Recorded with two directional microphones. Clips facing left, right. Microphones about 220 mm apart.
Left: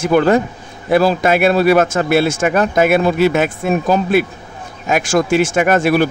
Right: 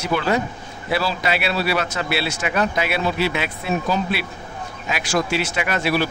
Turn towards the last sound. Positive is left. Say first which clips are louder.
# left 9 dB
turn(degrees=50)  # may be behind; listen again after turning